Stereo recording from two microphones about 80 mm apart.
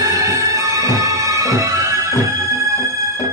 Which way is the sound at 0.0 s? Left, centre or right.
Right.